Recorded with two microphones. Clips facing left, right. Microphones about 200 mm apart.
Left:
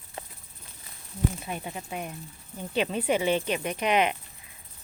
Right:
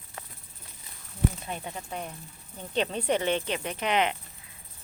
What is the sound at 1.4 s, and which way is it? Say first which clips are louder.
Speech: left 1 dB; 5° left (ahead or behind).